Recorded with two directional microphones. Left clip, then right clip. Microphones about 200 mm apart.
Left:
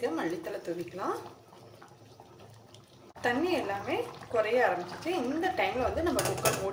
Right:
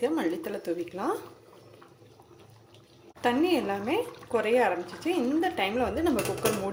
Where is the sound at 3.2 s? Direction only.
35° right (ahead or behind).